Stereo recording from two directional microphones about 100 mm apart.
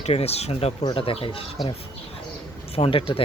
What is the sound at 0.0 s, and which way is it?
Speech, 90° left.